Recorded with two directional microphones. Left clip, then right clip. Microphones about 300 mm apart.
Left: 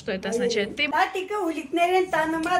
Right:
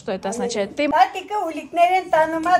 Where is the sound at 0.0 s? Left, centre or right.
Centre.